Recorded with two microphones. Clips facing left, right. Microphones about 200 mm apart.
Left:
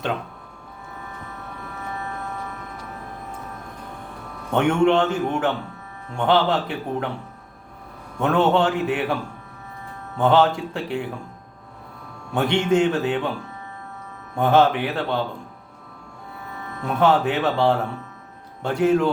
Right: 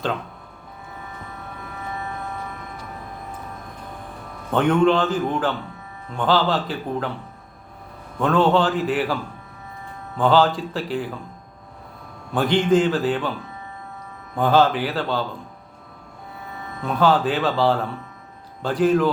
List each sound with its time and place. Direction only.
1.9 s music: 15° right (ahead or behind)
4.5 s speech: 25° left (ahead or behind)
8.2 s speech: 25° left (ahead or behind)
10.2 s speech: 25° left (ahead or behind)
12.3 s speech: 25° left (ahead or behind)
14.3 s speech: 25° left (ahead or behind)
16.5 s music: 15° right (ahead or behind)
16.9 s speech: 25° left (ahead or behind)